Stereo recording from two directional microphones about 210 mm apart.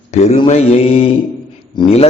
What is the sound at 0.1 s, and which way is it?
Mantra, 35° left (ahead or behind).